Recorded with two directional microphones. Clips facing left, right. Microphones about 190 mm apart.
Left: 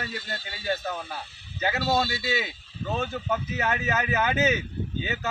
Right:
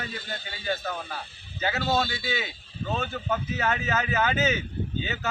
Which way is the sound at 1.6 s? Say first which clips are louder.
Left 1 dB; 10° left (ahead or behind).